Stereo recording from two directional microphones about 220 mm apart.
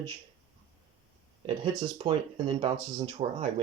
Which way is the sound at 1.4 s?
25° right (ahead or behind).